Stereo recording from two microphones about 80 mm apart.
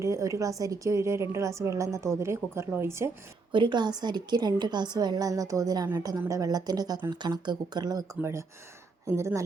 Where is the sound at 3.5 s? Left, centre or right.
Right.